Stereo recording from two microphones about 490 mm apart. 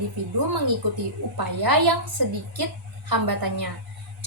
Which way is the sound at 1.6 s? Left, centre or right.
Right.